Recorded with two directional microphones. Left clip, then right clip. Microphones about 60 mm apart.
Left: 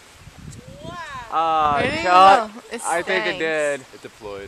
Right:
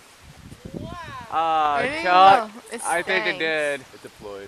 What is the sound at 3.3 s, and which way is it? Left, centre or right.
Speech, right.